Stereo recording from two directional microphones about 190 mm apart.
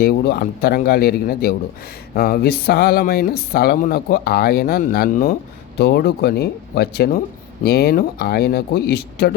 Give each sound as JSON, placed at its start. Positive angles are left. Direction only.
{"t": 0.0, "sound": "speech", "side_deg": 55}
{"t": 5.7, "sound": "speech", "side_deg": 60}